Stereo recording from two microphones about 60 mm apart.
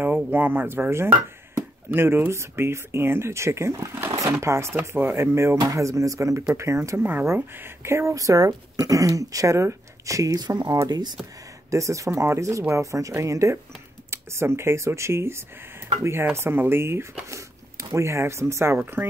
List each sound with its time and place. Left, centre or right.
0.0 s speech: right
5.6 s speech: right
7.0 s speech: right
8.1 s speech: right
11.7 s speech: right
14.1 s speech: right
17.3 s speech: right
19.0 s speech: right